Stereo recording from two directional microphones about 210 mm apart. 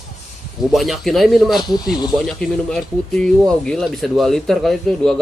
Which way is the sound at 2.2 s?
Centre (ahead or behind).